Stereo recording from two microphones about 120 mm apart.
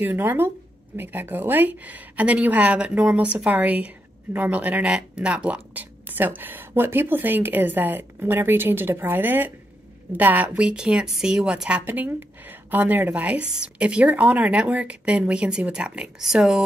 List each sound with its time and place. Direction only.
0.0 s a woman's voice: 15° right (ahead or behind)